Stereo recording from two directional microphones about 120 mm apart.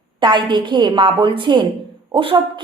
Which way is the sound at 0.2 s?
40° right (ahead or behind).